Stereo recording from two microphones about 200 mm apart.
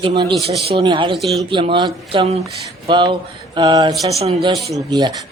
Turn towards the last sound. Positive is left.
turn(degrees=-20)  # may be behind; listen again after turning